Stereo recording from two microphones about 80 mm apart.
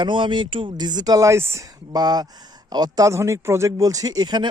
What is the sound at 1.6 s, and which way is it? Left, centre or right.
Speech, right.